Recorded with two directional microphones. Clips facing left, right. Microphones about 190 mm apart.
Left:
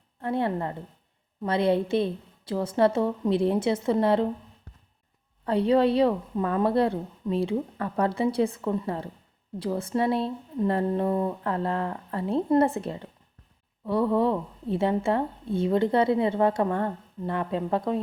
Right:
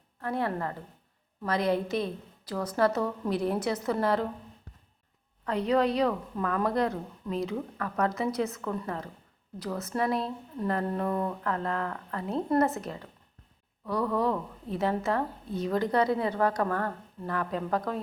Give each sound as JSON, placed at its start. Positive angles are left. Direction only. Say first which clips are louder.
{"t": 0.2, "sound": "a woman's voice", "louder": "left 4 dB", "side_deg": 25}
{"t": 5.5, "sound": "a woman's voice", "louder": "left 4 dB", "side_deg": 30}